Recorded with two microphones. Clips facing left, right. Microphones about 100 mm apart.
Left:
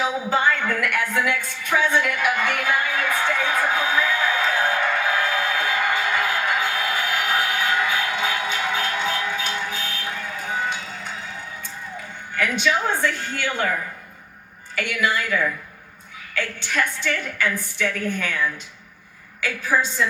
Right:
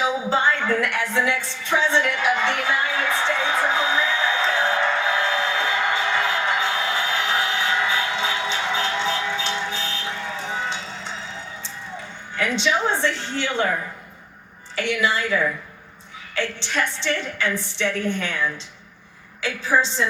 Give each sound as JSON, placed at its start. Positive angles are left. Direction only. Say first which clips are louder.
{"t": 0.3, "sound": "music", "louder": "left 1 dB", "side_deg": -25}
{"t": 12.4, "sound": "a woman's voice", "louder": "even", "side_deg": -25}
{"t": 14.8, "sound": "a woman's voice", "louder": "right 1 dB", "side_deg": -25}
{"t": 19.4, "sound": "a woman's voice", "louder": "right 1 dB", "side_deg": -25}